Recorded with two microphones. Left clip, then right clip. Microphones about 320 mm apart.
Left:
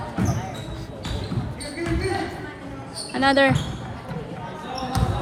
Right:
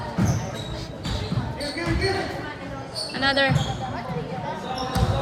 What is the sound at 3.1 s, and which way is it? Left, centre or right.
Basketball bounce, centre.